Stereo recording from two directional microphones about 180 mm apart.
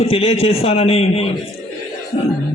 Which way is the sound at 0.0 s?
35° left (ahead or behind).